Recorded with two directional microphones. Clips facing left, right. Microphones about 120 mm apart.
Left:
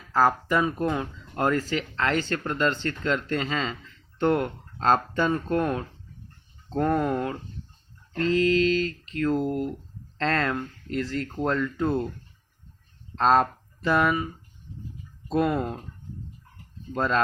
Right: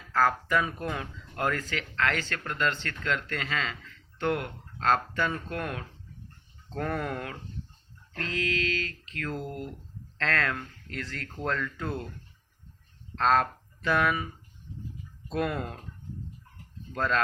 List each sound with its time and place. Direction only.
0.1 s speech: 20° left (ahead or behind)
4.3 s speech: 35° left (ahead or behind)
6.7 s speech: 20° left (ahead or behind)
13.1 s speech: 25° left (ahead or behind)
15.3 s speech: 25° left (ahead or behind)
16.9 s speech: 20° left (ahead or behind)